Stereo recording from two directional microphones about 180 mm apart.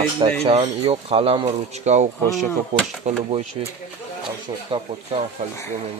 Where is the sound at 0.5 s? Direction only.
30° right (ahead or behind).